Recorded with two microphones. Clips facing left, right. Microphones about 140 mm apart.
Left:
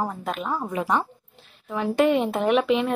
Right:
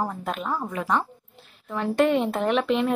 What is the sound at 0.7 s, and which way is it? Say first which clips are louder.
Speech: left 2 dB; 20° left (ahead or behind).